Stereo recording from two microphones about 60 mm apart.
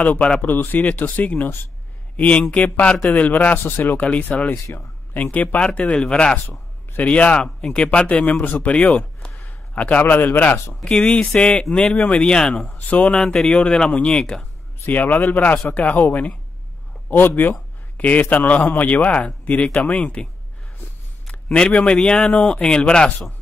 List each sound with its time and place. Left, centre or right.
0.0 s a man's voice: left
0.5 s a man's voice: left
5.9 s a man's voice: centre
6.9 s a man's voice: left
11.0 s a man's voice: centre
12.7 s speech: left
13.1 s a man's voice: centre
14.9 s a man's voice: left
17.4 s a man's voice: left
21.5 s a man's voice: centre